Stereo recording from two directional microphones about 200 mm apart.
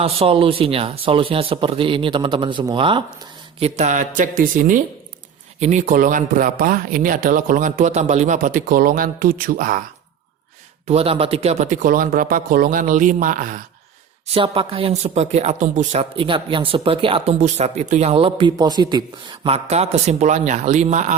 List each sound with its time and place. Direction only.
0.0 s speech: 30° right (ahead or behind)
3.6 s speech: 35° right (ahead or behind)
10.8 s speech: 30° right (ahead or behind)
14.3 s speech: 25° right (ahead or behind)